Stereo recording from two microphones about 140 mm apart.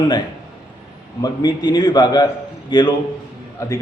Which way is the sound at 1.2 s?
30° left (ahead or behind).